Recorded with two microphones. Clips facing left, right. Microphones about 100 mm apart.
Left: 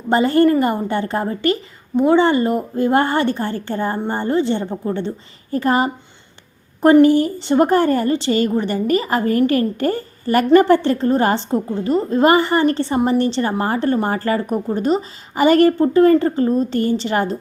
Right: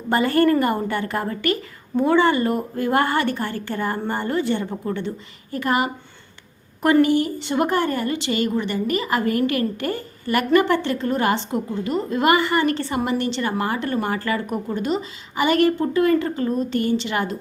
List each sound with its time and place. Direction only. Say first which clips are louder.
0.1 s a woman's voice: left 4 dB; 25° left (ahead or behind)